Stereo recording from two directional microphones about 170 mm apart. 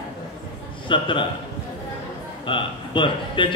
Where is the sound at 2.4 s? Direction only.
30° left (ahead or behind).